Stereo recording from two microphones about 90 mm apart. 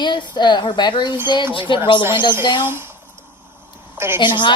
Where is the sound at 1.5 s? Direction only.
65° left (ahead or behind).